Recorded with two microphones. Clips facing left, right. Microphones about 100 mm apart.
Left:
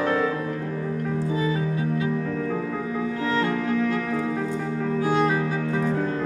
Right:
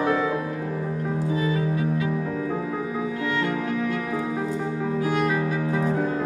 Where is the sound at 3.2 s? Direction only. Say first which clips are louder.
Left 3 dB; 35° left (ahead or behind).